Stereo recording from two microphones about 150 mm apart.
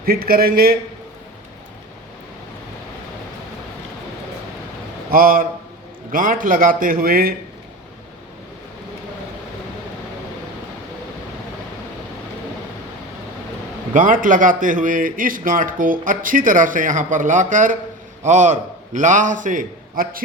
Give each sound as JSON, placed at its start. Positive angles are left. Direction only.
{"t": 0.0, "sound": "a man's voice", "side_deg": -80}
{"t": 5.1, "sound": "a man's voice", "side_deg": -70}
{"t": 13.9, "sound": "a man's voice", "side_deg": -60}